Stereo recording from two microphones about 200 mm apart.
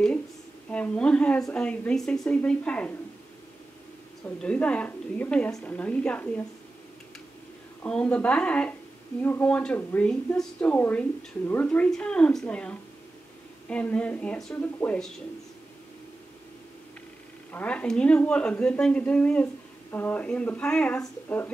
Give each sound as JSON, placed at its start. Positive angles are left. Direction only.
{"t": 0.7, "sound": "speech", "side_deg": 5}
{"t": 4.4, "sound": "a woman's voice", "side_deg": 5}
{"t": 7.8, "sound": "a woman's voice", "side_deg": 5}
{"t": 17.5, "sound": "a woman's voice", "side_deg": 5}